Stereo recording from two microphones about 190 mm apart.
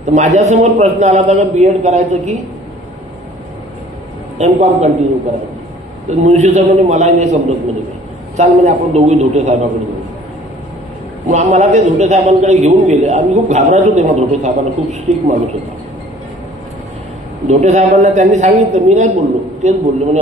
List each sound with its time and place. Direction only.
0.0 s a man's voice: 40° right (ahead or behind)
4.4 s a man's voice: 35° right (ahead or behind)
6.0 s a man's voice: 40° right (ahead or behind)
11.2 s a man's voice: 40° right (ahead or behind)
17.5 s a man's voice: 35° right (ahead or behind)